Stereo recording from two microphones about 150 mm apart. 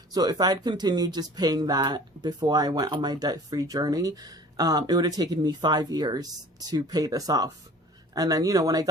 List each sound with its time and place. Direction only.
0.1 s speech: 25° right (ahead or behind)